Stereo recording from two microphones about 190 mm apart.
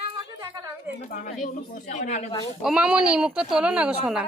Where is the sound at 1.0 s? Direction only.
45° left (ahead or behind).